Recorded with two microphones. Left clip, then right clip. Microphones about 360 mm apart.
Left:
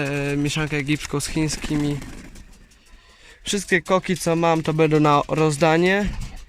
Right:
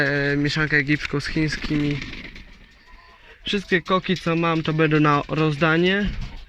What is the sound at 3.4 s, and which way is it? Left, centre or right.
Speech, centre.